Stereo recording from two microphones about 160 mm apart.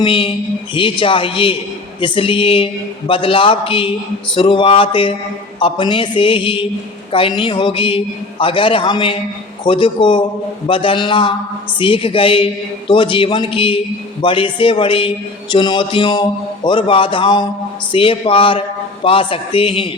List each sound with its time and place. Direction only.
0.0 s a man's voice: 35° left (ahead or behind)